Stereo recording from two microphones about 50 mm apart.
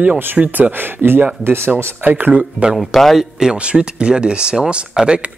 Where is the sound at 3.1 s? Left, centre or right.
Centre.